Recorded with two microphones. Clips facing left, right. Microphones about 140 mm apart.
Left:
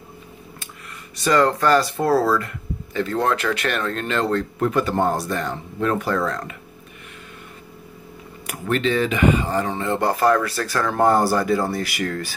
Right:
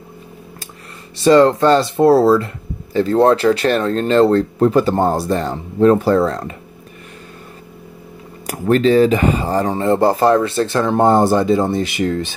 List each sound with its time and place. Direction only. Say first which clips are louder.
1.1 s speech: right 8 dB; 25° right (ahead or behind)
8.5 s speech: right 8 dB; 35° right (ahead or behind); by 12.4 s 20° right (ahead or behind)